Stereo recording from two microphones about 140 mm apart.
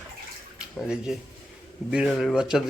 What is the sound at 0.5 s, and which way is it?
Speech, 5° right (ahead or behind).